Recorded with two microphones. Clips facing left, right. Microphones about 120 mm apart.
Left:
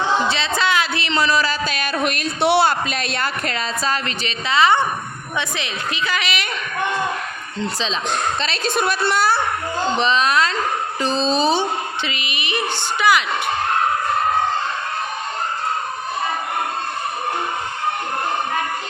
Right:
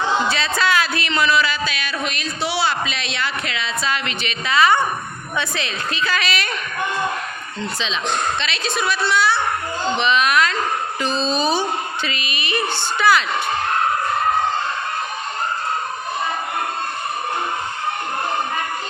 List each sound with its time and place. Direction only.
0.3 s a man's voice: 25° left (ahead or behind)
8.4 s a woman's voice: 45° left (ahead or behind)
10.0 s a woman's voice: 30° left (ahead or behind); by 13.2 s 15° left (ahead or behind)